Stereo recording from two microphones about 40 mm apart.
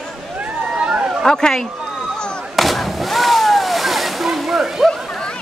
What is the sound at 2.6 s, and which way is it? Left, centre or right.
Vehicle, centre.